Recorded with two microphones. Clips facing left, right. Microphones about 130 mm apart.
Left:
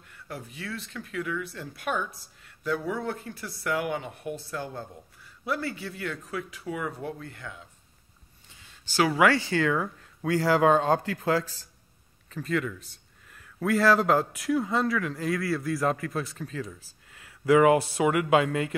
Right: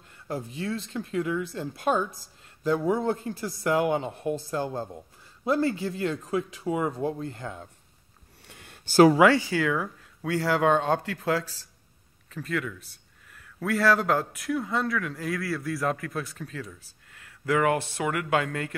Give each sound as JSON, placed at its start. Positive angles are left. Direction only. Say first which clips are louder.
{"t": 0.1, "sound": "speech", "louder": "right 6 dB", "side_deg": -30}
{"t": 8.5, "sound": "a sound", "louder": "right 5 dB", "side_deg": -55}
{"t": 9.1, "sound": "speech", "louder": "right 3 dB", "side_deg": -15}